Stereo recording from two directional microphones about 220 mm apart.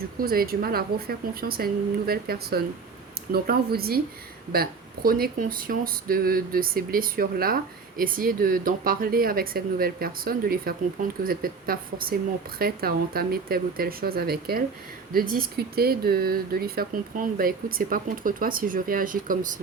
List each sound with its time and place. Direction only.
0.2 s speech: 40° right (ahead or behind)